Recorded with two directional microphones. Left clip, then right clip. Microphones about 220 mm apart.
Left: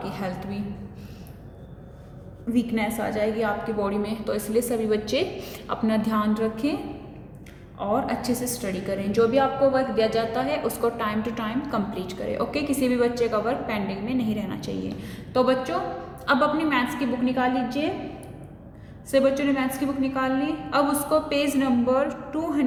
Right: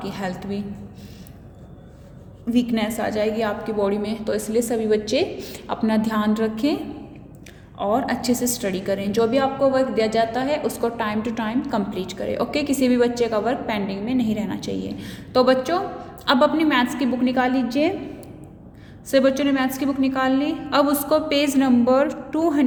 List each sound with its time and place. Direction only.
0.0 s a woman's voice: 40° right (ahead or behind)
2.5 s a woman's voice: 40° right (ahead or behind)
7.8 s a woman's voice: 40° right (ahead or behind)
19.1 s a woman's voice: 40° right (ahead or behind)